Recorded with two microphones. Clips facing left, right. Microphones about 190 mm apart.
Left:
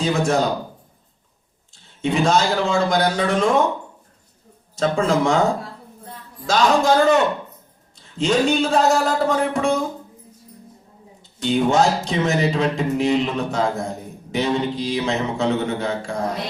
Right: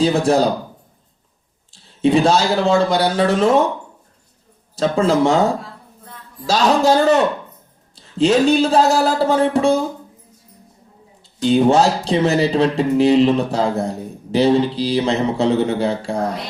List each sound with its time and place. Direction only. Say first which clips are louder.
0.0 s speech: right 4 dB; 35° right (ahead or behind)
1.7 s speech: right 7 dB; 35° right (ahead or behind)
4.8 s speech: right 3 dB; 35° right (ahead or behind)
6.5 s speech: right 2 dB; 35° right (ahead or behind)
7.9 s speech: right 5 dB; 35° right (ahead or behind)
11.4 s speech: right 4 dB; 30° right (ahead or behind)